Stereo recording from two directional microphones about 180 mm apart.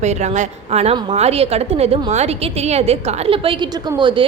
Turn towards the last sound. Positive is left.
turn(degrees=-25)  # may be behind; listen again after turning